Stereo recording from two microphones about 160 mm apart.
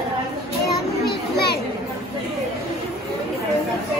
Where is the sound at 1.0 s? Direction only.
85° left.